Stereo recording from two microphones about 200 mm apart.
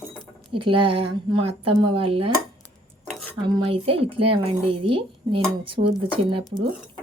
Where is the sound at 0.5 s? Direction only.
25° right (ahead or behind).